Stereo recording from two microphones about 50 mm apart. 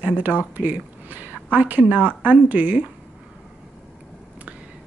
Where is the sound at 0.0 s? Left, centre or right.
Right.